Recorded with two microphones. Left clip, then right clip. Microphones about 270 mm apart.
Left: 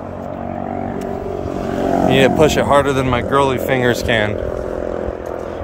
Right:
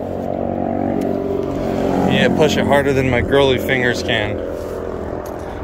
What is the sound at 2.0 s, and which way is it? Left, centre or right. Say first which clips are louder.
Speech: left 3 dB; left.